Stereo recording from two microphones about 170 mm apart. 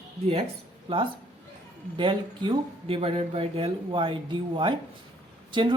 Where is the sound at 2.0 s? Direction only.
30° right (ahead or behind).